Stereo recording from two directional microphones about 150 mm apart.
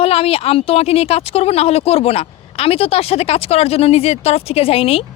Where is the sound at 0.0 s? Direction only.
40° left (ahead or behind).